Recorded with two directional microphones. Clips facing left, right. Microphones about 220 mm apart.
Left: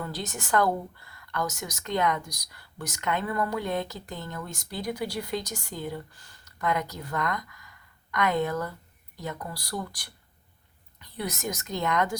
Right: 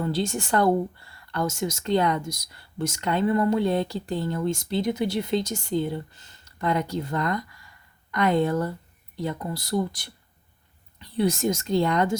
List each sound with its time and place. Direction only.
0.0 s speech: 25° right (ahead or behind)